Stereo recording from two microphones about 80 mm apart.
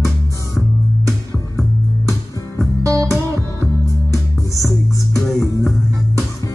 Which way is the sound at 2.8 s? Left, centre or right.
Right.